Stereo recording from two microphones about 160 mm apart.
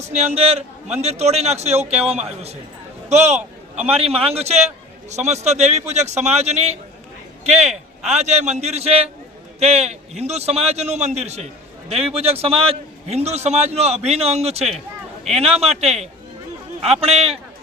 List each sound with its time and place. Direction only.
0.0 s a man's voice: 45° right (ahead or behind)
16.8 s a man's voice: 40° right (ahead or behind)